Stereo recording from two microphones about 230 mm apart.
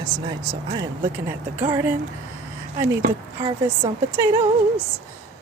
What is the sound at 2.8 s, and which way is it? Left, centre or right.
Speech, right.